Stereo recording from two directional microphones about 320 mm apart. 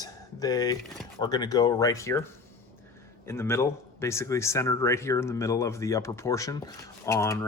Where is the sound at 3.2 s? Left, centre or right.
Centre.